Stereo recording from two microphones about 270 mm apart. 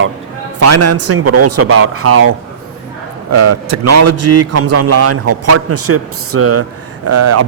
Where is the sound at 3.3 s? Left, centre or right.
Right.